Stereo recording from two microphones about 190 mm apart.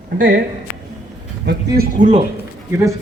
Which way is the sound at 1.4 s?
55° right (ahead or behind).